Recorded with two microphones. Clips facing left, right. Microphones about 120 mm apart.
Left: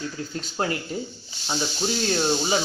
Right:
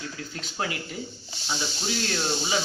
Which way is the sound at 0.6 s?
40° left (ahead or behind).